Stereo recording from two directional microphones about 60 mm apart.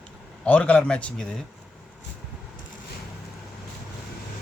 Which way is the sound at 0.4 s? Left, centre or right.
Left.